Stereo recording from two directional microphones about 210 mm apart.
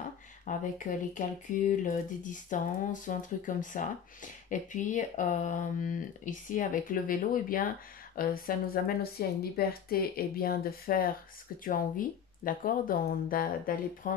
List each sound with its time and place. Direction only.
0.5 s a woman's voice: 40° left (ahead or behind)